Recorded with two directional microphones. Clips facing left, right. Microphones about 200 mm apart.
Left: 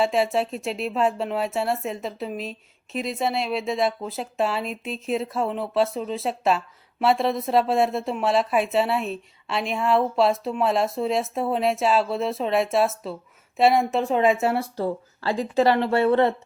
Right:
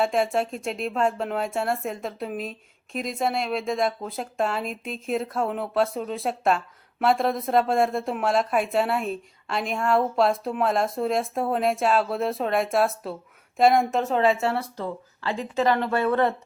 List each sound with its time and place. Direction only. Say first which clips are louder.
0.0 s speech: left 1 dB; 5° left (ahead or behind)
2.9 s a woman's voice: left 2 dB; 45° right (ahead or behind)
3.2 s speech: even; centre (ahead or behind)
4.6 s a woman's voice: left 1 dB; 45° right (ahead or behind)
5.1 s speech: left 1 dB; centre (ahead or behind); by 16.3 s 25° left (ahead or behind)